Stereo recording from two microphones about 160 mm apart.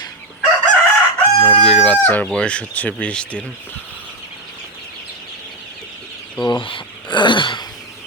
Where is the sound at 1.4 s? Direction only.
30° left (ahead or behind).